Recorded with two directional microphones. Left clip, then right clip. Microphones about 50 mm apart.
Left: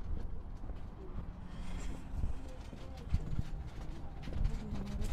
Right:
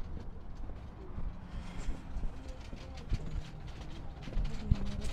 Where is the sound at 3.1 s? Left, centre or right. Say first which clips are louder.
Left 2 dB; centre.